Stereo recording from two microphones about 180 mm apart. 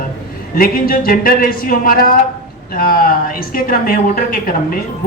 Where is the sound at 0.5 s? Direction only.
55° left (ahead or behind).